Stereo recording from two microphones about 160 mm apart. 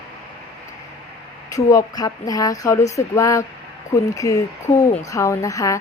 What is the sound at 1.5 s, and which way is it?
Speech, 20° left (ahead or behind).